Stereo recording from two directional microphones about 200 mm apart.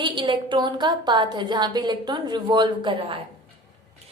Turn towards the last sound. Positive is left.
turn(degrees=-25)  # may be behind; listen again after turning